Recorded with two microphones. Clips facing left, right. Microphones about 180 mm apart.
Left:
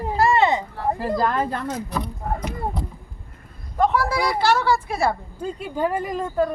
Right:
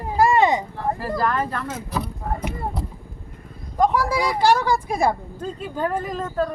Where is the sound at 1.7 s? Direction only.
5° right (ahead or behind).